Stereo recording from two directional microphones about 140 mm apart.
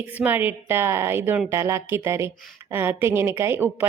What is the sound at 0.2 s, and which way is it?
Speech, 15° right (ahead or behind).